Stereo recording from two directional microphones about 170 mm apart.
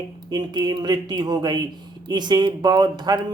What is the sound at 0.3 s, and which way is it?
A woman's voice, 25° right (ahead or behind).